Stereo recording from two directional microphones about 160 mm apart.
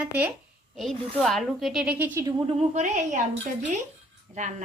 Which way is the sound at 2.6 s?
45° right (ahead or behind).